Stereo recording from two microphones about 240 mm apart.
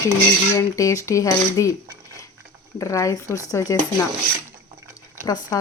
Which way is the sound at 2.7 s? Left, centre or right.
Centre.